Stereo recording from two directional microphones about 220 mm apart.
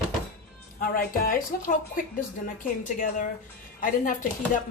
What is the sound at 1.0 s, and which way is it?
A woman's voice, 40° left (ahead or behind).